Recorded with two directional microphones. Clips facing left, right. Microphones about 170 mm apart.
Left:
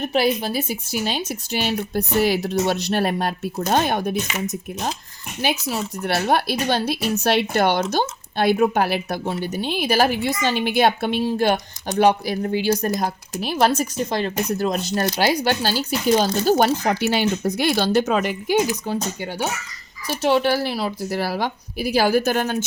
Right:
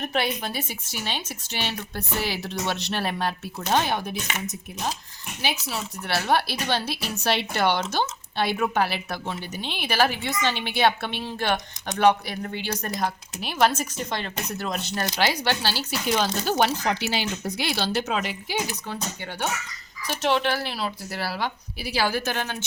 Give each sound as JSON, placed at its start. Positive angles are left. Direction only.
{"t": 0.2, "sound": "speech", "side_deg": 35}
{"t": 1.2, "sound": "speech", "side_deg": 10}
{"t": 2.2, "sound": "a woman's voice", "side_deg": 40}
{"t": 5.4, "sound": "a woman's voice", "side_deg": 45}
{"t": 20.1, "sound": "a woman's voice", "side_deg": 30}